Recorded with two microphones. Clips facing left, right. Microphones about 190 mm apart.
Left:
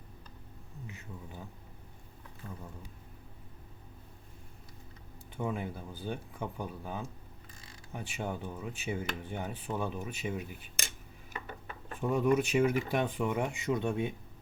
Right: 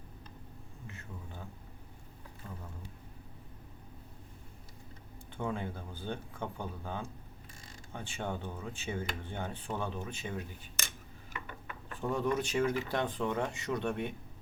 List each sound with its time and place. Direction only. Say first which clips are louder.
5.4 s speech: left 1 dB; 10° left (ahead or behind)
11.3 s a sound: left 2 dB; 40° left (ahead or behind)
11.9 s speech: left 4 dB; 10° left (ahead or behind)